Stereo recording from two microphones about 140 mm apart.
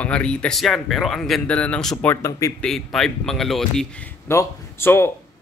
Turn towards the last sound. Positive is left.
turn(degrees=15)  # may be behind; listen again after turning